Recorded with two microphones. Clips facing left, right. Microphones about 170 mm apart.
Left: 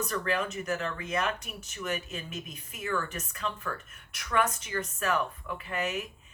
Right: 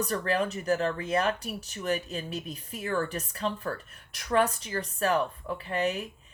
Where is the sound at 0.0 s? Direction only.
35° right (ahead or behind).